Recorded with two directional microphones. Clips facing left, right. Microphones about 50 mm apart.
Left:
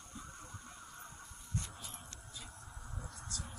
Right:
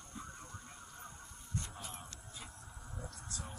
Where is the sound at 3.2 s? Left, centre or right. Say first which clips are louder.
Even; right.